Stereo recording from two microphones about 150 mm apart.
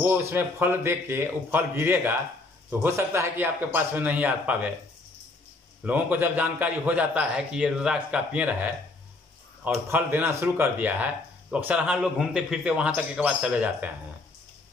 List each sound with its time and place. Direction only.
0.0 s a man's voice: 15° right (ahead or behind)
5.9 s a man's voice: 10° right (ahead or behind)